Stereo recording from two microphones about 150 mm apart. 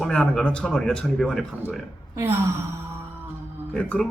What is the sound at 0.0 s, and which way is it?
A man's voice, 5° left (ahead or behind).